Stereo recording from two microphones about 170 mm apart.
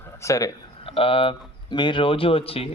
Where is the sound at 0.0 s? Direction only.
15° left (ahead or behind).